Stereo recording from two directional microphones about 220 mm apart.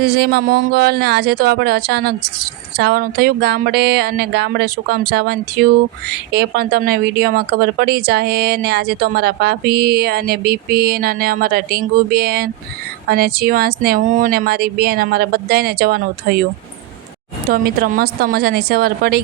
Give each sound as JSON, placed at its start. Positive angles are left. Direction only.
{"t": 0.0, "sound": "a woman's voice", "side_deg": -45}
{"t": 17.5, "sound": "a woman's voice", "side_deg": -40}